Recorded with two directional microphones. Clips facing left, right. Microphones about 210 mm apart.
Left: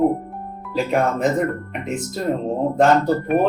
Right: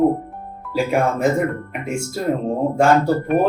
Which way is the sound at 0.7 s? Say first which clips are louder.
Right 1 dB; 10° right (ahead or behind).